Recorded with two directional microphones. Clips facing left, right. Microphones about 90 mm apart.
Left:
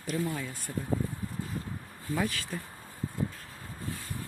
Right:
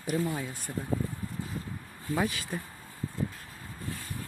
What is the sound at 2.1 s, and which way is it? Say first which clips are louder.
Speech: right 1 dB; 15° right (ahead or behind).